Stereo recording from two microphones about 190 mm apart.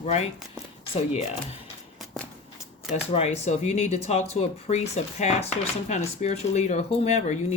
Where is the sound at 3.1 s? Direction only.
35° left (ahead or behind).